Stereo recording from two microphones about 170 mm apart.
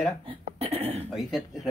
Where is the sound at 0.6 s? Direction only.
35° right (ahead or behind).